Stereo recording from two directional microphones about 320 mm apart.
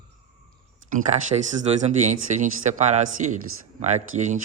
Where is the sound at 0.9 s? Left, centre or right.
Right.